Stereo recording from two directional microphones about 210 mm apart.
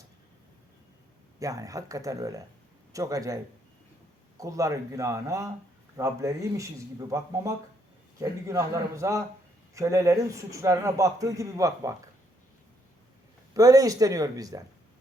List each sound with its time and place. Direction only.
1.4 s a man's voice: 15° right (ahead or behind)
13.5 s a man's voice: 15° right (ahead or behind)